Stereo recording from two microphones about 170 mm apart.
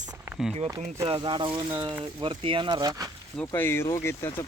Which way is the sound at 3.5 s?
15° left (ahead or behind).